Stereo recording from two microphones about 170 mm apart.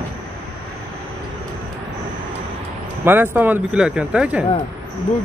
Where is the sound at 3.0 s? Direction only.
10° right (ahead or behind).